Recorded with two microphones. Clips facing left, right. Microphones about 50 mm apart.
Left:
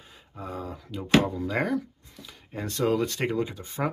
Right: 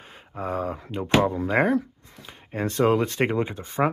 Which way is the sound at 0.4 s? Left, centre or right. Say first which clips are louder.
Right 8 dB; right.